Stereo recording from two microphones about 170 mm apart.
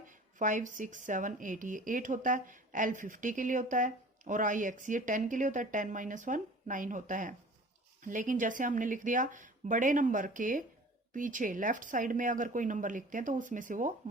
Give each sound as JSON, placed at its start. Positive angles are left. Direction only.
{"t": 0.1, "sound": "speech", "side_deg": -50}